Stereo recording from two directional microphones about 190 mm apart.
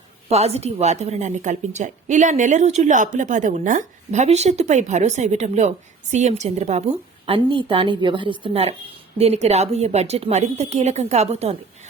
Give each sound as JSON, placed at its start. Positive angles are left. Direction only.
{"t": 0.3, "sound": "a woman's voice", "side_deg": -35}